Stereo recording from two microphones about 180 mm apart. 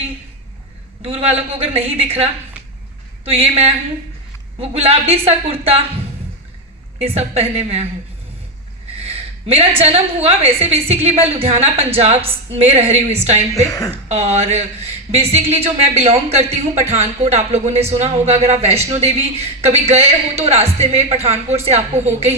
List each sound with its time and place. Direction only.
1.0 s a woman's voice: 35° right (ahead or behind)
7.0 s a woman's voice: 35° right (ahead or behind)
9.0 s a woman's voice: 35° right (ahead or behind)